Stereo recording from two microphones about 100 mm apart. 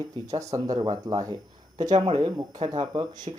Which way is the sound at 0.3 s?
35° right (ahead or behind).